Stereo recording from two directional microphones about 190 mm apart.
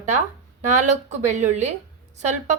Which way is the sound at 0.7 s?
40° right (ahead or behind).